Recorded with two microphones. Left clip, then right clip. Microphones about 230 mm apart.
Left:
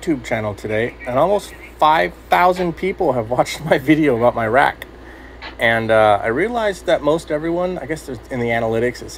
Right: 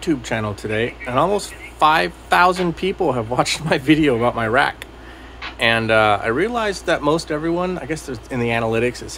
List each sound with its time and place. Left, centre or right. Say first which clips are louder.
0.2 s speech: left 2 dB; centre